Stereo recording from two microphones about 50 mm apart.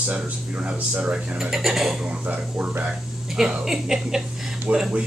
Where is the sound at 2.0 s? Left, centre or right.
Right.